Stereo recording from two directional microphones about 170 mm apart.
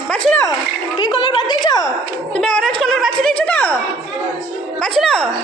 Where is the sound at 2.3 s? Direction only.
5° left (ahead or behind).